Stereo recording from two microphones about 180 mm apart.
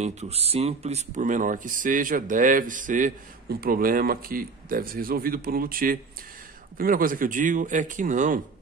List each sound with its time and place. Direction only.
0.0 s speech: 40° right (ahead or behind)